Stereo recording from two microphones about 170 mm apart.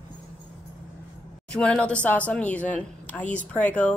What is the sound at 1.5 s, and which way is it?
Speech, 5° left (ahead or behind).